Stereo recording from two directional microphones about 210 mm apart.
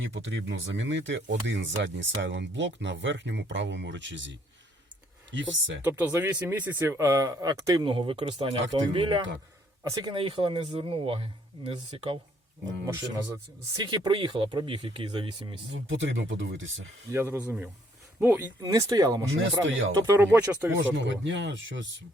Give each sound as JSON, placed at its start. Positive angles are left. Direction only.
{"t": 0.0, "sound": "speech", "side_deg": -60}
{"t": 5.8, "sound": "speech", "side_deg": -10}
{"t": 12.8, "sound": "speech", "side_deg": -15}
{"t": 15.9, "sound": "speech", "side_deg": -65}
{"t": 17.1, "sound": "speech", "side_deg": -10}
{"t": 19.6, "sound": "speech", "side_deg": -65}
{"t": 20.1, "sound": "speech", "side_deg": -10}
{"t": 20.9, "sound": "speech", "side_deg": -60}